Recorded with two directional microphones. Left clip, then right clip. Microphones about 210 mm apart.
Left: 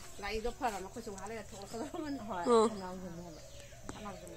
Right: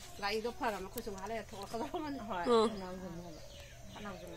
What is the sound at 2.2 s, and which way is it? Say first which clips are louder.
Speech: left 2 dB; 10° left (ahead or behind).